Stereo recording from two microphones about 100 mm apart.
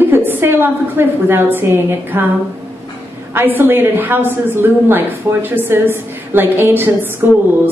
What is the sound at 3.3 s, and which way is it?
A woman's voice, 20° right (ahead or behind).